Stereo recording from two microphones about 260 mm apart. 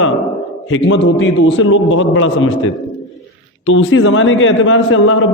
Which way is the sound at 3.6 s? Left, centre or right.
Left.